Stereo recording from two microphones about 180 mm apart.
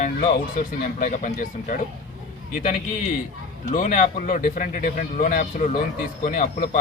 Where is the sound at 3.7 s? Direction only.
45° left (ahead or behind).